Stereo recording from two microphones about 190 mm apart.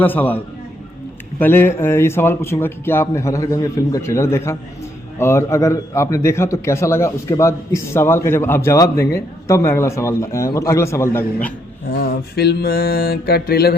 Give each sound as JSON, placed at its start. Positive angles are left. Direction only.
{"t": 0.0, "sound": "a man's voice", "side_deg": 10}
{"t": 11.9, "sound": "mantra", "side_deg": 55}